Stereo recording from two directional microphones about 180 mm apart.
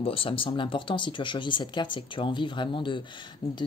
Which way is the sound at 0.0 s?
30° left (ahead or behind).